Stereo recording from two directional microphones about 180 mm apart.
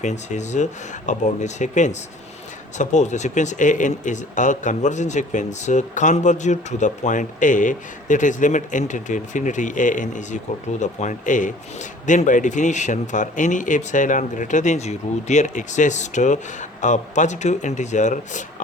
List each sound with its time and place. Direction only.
0.0 s speech: 40° left (ahead or behind)